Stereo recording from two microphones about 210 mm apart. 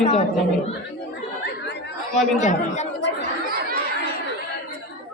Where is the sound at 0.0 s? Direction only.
30° left (ahead or behind).